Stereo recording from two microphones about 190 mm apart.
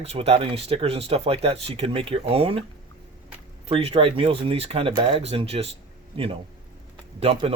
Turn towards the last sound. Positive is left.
turn(degrees=-30)  # may be behind; listen again after turning